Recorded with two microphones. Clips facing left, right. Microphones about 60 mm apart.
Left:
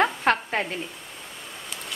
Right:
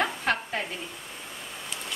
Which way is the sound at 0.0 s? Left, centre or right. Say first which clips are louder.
Left 5 dB; left.